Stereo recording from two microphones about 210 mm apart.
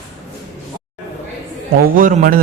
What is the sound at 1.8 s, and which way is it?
Speech, 40° right (ahead or behind).